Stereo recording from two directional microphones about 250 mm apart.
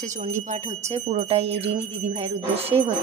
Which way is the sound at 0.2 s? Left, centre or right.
Right.